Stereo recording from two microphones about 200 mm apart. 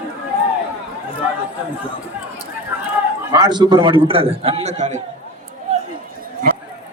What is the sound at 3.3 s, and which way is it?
A man's voice, 20° right (ahead or behind).